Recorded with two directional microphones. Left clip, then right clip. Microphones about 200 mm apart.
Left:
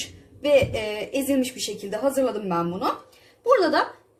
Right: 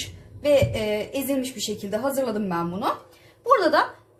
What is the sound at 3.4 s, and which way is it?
Speech, 45° left (ahead or behind).